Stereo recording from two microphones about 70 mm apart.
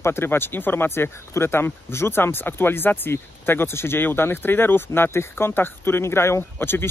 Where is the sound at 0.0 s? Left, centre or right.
Left.